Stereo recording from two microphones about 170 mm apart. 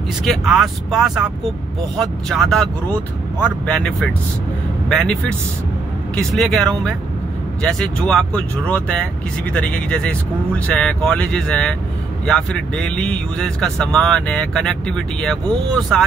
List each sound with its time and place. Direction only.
0.2 s speech: centre (ahead or behind)
6.1 s speech: centre (ahead or behind)